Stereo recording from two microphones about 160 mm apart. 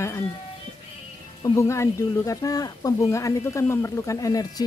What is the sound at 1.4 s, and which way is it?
Speech, 20° left (ahead or behind).